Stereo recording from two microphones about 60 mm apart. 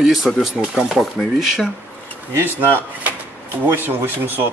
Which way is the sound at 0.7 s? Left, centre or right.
Centre.